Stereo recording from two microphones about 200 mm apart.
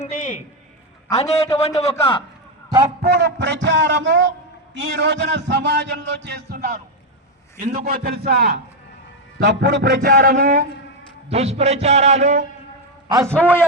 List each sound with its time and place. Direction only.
0.0 s a sound: 35° left (ahead or behind)
1.1 s a man's voice: 30° left (ahead or behind)
3.0 s a man's voice: 55° right (ahead or behind)
11.3 s a man's voice: 30° right (ahead or behind)
13.2 s a man's voice: 10° left (ahead or behind)